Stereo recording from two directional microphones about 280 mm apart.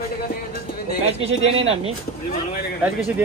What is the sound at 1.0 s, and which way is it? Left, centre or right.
Speech, right.